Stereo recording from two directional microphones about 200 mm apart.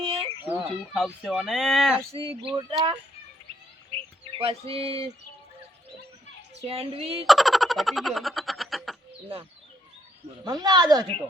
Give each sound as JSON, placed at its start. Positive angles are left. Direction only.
{"t": 0.0, "sound": "chicken", "side_deg": -30}
{"t": 0.6, "sound": "speech", "side_deg": -5}
{"t": 2.4, "sound": "speech", "side_deg": -25}
{"t": 3.9, "sound": "bird", "side_deg": -30}
{"t": 6.7, "sound": "speech", "side_deg": -30}
{"t": 7.3, "sound": "a sound", "side_deg": 0}
{"t": 10.4, "sound": "speech", "side_deg": -20}